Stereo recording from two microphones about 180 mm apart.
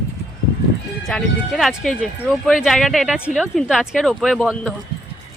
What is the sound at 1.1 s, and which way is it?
A woman's voice, centre (ahead or behind).